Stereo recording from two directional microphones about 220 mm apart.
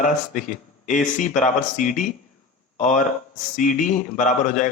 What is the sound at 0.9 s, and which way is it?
A man's voice, 35° left (ahead or behind).